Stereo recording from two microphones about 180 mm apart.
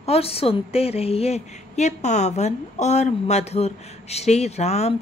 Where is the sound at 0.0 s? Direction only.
35° left (ahead or behind).